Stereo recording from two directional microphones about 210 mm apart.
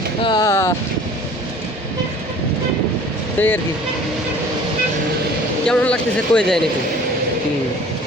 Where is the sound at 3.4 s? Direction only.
10° left (ahead or behind).